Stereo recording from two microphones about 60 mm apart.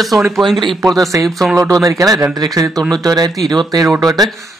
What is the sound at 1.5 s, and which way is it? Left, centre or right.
Speech, right.